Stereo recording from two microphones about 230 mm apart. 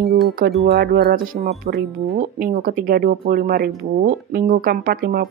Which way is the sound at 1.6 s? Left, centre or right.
Right.